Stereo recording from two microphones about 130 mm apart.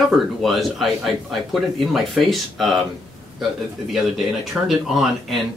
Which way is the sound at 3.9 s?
Centre (ahead or behind).